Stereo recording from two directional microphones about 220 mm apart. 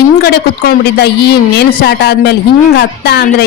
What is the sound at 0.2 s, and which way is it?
Speech, 45° left (ahead or behind).